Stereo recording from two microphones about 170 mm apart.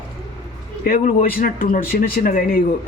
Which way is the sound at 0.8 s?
55° left (ahead or behind).